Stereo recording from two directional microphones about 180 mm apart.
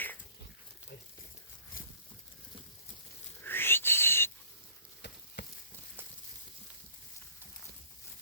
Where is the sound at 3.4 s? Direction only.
10° left (ahead or behind).